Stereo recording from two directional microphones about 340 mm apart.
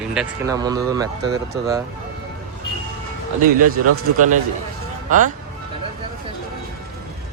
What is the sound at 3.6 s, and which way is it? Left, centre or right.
Speech, right.